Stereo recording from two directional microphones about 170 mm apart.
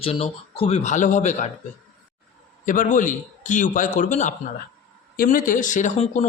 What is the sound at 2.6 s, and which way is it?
Speech, 50° left (ahead or behind).